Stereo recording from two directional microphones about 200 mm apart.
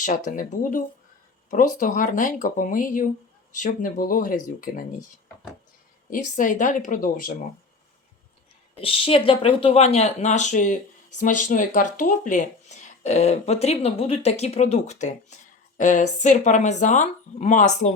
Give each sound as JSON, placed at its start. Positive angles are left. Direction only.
{"t": 0.3, "sound": "speech", "side_deg": 40}
{"t": 6.1, "sound": "speech", "side_deg": 40}
{"t": 8.7, "sound": "speech", "side_deg": 25}